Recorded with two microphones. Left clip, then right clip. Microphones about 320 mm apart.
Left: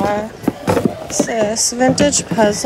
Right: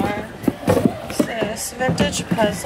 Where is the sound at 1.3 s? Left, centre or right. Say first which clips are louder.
Left 8 dB; left.